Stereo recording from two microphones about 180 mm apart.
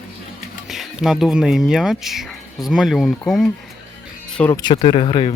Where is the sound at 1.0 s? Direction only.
Centre (ahead or behind).